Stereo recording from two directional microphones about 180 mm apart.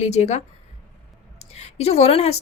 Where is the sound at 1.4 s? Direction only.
35° left (ahead or behind).